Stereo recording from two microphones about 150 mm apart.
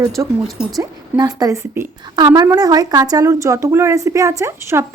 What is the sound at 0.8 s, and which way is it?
A woman's voice, 25° right (ahead or behind).